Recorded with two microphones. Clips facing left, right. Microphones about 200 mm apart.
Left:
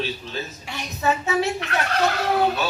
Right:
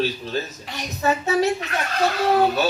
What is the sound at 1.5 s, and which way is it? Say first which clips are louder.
Fowl: left 2 dB; 65° left (ahead or behind).